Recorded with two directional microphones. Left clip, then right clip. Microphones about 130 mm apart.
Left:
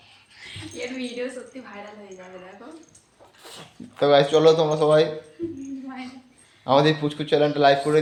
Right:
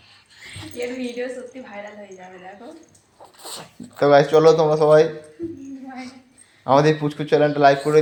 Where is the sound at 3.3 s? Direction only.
15° right (ahead or behind).